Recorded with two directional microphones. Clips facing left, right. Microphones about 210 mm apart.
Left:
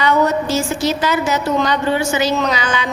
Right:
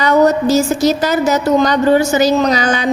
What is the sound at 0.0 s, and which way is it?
A woman's voice, 40° right (ahead or behind).